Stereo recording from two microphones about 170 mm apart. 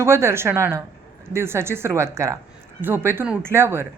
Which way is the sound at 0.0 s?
15° right (ahead or behind).